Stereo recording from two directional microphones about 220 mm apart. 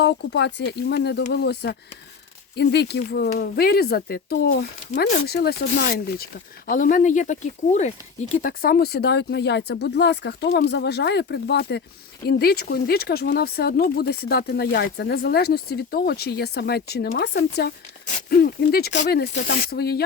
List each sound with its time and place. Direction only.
0.0 s speech: 50° left (ahead or behind)